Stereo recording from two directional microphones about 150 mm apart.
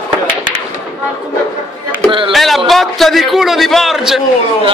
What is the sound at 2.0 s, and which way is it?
Speech, 35° right (ahead or behind).